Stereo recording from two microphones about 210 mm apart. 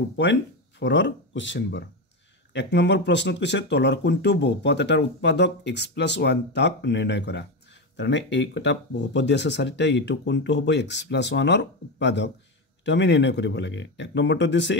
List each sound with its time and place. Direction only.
0.2 s speech: 55° left (ahead or behind)